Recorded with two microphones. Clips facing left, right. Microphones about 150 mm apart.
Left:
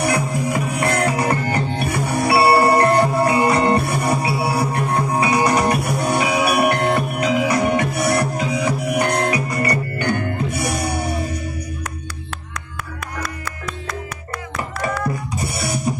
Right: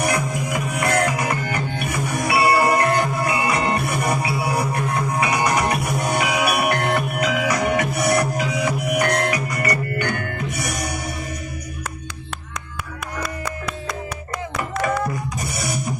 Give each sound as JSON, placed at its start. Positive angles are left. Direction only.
{"t": 0.0, "sound": "music", "side_deg": 30}